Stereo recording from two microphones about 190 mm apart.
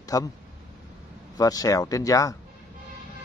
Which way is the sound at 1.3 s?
20° left (ahead or behind).